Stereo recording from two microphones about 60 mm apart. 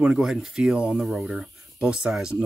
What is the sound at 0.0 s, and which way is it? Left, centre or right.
Speech, centre.